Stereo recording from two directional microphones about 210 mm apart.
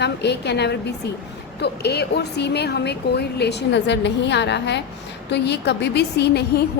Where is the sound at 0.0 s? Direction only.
55° left (ahead or behind).